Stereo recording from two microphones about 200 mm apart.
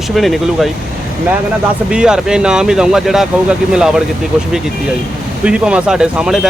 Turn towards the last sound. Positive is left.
turn(degrees=0)  # may be behind; listen again after turning